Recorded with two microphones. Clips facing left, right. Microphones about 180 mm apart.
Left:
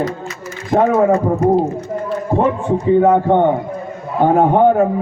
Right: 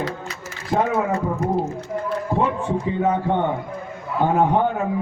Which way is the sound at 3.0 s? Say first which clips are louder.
Left 6 dB; 50° left (ahead or behind).